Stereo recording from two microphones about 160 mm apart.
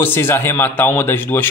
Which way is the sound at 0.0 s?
15° left (ahead or behind).